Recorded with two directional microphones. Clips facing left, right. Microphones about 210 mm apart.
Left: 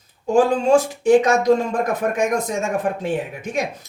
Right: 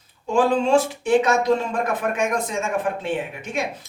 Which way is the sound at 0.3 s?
45° left (ahead or behind).